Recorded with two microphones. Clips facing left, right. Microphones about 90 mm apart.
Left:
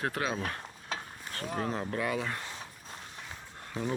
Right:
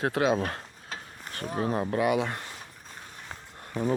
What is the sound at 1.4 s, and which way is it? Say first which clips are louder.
Speech: right 5 dB; 10° right (ahead or behind).